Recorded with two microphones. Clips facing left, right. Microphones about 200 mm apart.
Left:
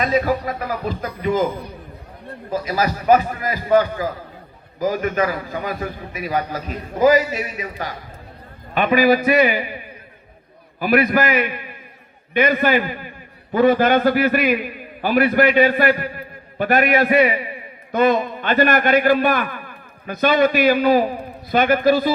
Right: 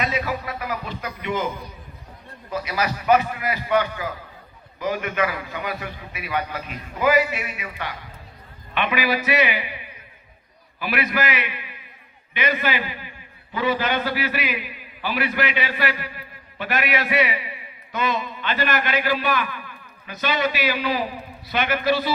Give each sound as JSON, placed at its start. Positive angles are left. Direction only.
{"t": 0.0, "sound": "a man's voice", "side_deg": 40}